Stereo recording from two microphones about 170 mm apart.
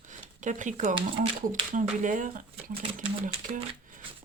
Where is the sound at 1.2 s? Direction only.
50° right (ahead or behind).